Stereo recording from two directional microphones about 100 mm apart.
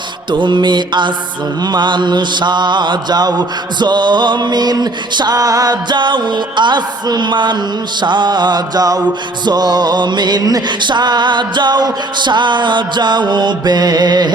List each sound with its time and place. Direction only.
0.3 s mantra: 50° right (ahead or behind)